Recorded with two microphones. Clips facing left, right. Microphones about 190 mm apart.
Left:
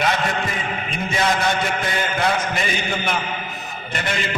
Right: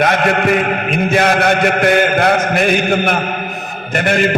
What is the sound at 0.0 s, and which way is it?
A man's voice, 65° right (ahead or behind).